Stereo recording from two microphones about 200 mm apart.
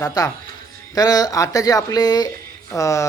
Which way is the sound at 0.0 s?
20° left (ahead or behind).